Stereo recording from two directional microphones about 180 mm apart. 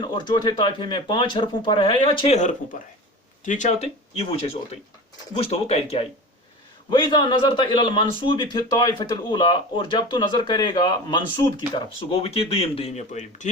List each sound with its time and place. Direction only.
0.0 s speech: 25° left (ahead or behind); by 13.5 s 40° left (ahead or behind)